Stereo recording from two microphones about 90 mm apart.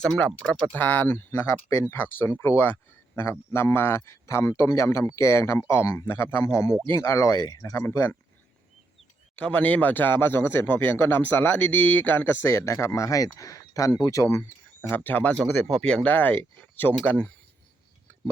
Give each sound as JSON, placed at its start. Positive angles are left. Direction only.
{"t": 0.0, "sound": "speech", "side_deg": 5}
{"t": 9.4, "sound": "speech", "side_deg": 15}
{"t": 14.8, "sound": "speech", "side_deg": 20}
{"t": 15.4, "sound": "speech", "side_deg": 5}